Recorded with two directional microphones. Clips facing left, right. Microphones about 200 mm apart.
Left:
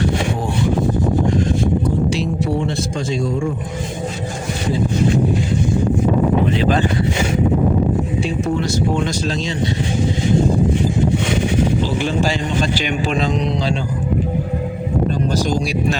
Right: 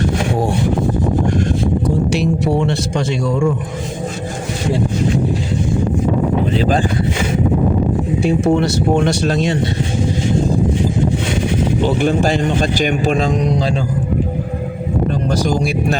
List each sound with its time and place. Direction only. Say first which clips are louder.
2.1 s speech: right 4 dB; 70° right (ahead or behind)
6.6 s speech: right 1 dB; 35° right (ahead or behind)
8.2 s speech: right 6 dB; 65° right (ahead or behind)
11.8 s a man's voice: right 4 dB; 55° right (ahead or behind)
15.4 s a man's voice: right 2 dB; 55° right (ahead or behind)